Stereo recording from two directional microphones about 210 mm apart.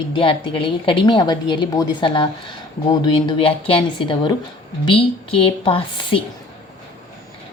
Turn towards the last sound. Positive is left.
turn(degrees=25)  # may be behind; listen again after turning